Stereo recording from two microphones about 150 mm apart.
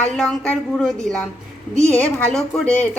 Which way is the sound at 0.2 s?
5° left (ahead or behind).